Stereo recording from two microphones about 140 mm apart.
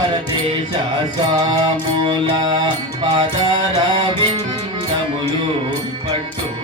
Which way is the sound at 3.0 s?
30° right (ahead or behind).